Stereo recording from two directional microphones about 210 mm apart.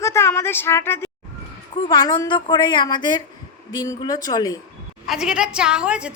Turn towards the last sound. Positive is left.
turn(degrees=-5)  # may be behind; listen again after turning